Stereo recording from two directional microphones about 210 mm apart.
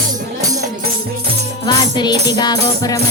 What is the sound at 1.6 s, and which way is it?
Music, 20° left (ahead or behind).